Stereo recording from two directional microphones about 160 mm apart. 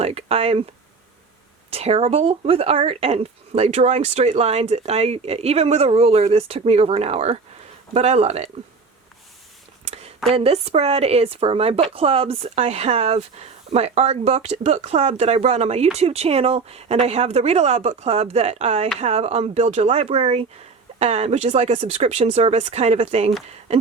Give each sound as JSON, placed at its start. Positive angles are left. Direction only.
{"t": 0.0, "sound": "speech", "side_deg": -40}
{"t": 1.7, "sound": "speech", "side_deg": -40}
{"t": 9.8, "sound": "a sound", "side_deg": -40}
{"t": 10.2, "sound": "speech", "side_deg": -40}